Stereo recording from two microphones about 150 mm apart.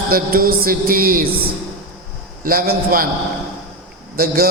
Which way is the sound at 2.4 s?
75° right (ahead or behind).